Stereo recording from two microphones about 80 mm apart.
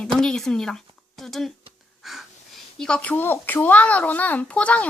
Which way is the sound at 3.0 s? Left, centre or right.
Left.